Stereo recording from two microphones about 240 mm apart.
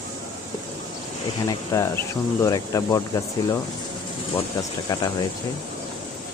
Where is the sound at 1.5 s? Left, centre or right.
Centre.